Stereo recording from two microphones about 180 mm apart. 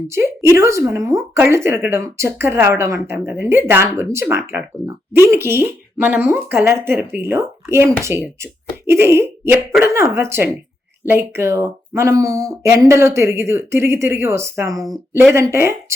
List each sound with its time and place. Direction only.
0.1 s a woman's voice: 15° right (ahead or behind)